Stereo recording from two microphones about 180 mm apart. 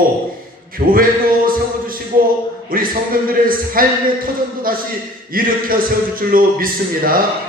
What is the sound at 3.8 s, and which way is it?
Speech, 55° right (ahead or behind).